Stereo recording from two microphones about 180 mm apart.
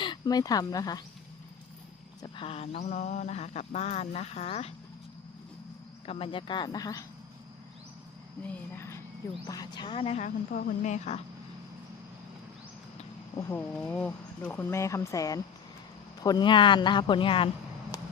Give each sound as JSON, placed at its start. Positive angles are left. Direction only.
{"t": 0.0, "sound": "speech", "side_deg": 25}
{"t": 2.2, "sound": "mantra", "side_deg": 30}
{"t": 6.1, "sound": "speech", "side_deg": 30}
{"t": 8.4, "sound": "speech", "side_deg": 10}
{"t": 10.2, "sound": "speech", "side_deg": 50}
{"t": 13.3, "sound": "speech", "side_deg": 10}
{"t": 17.9, "sound": "a sound", "side_deg": 20}